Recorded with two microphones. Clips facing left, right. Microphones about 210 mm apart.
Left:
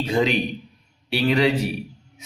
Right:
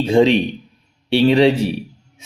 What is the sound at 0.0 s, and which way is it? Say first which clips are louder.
Speech: right 8 dB; 30° right (ahead or behind).